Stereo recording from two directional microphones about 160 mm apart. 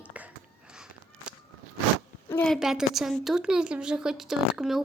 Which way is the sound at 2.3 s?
10° left (ahead or behind).